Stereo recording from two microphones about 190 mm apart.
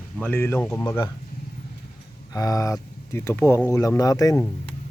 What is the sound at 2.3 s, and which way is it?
Speech, 20° left (ahead or behind).